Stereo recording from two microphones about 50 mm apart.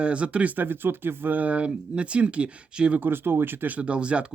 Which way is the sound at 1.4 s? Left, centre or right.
Right.